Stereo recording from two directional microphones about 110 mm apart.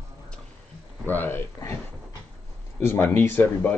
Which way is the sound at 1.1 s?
15° left (ahead or behind).